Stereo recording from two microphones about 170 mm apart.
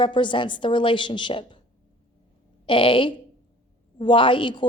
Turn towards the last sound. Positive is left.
turn(degrees=30)  # may be behind; listen again after turning